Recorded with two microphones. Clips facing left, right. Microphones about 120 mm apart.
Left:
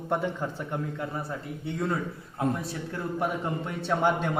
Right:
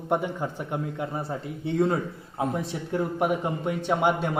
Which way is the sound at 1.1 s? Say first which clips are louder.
Right 3 dB; 25° right (ahead or behind).